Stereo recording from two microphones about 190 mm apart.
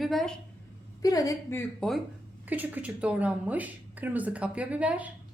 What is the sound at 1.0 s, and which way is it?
Speech, 20° left (ahead or behind).